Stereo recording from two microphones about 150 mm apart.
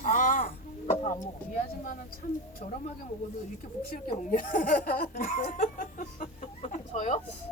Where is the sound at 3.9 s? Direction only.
70° left (ahead or behind).